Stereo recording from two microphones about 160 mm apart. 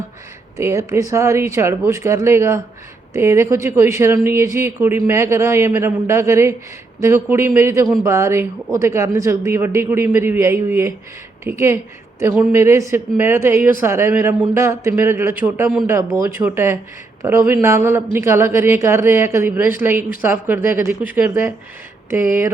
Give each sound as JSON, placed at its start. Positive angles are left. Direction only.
{"t": 0.5, "sound": "speech", "side_deg": -20}